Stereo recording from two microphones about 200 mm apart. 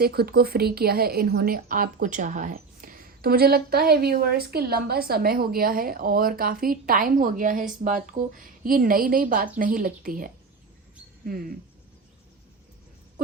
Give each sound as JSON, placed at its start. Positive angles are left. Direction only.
{"t": 0.0, "sound": "a woman's voice", "side_deg": -50}